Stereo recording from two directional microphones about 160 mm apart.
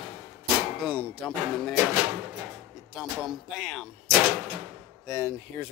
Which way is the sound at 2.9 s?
Centre (ahead or behind).